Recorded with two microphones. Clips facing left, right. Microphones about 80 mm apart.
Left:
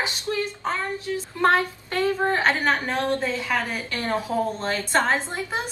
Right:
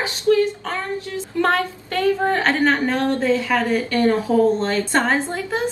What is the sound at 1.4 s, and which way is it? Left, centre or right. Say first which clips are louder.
A woman's voice: right 1 dB; centre.